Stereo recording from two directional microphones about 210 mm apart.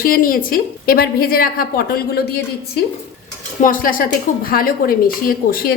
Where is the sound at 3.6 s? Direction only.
40° left (ahead or behind).